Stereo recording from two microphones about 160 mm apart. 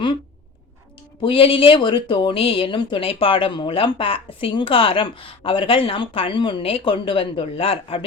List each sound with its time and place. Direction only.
1.2 s speech: 35° left (ahead or behind)